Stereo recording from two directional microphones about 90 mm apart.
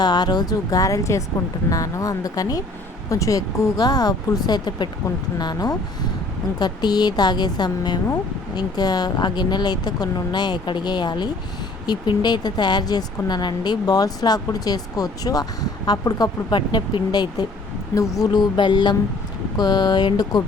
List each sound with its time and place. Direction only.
0.0 s speech: 50° left (ahead or behind)
17.9 s speech: 40° left (ahead or behind)
18.3 s music: 60° left (ahead or behind)
19.5 s speech: 50° left (ahead or behind)